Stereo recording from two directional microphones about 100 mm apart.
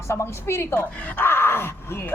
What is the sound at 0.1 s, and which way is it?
Speech, 25° left (ahead or behind).